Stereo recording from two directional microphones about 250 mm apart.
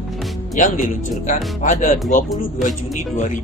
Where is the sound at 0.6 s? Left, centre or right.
Left.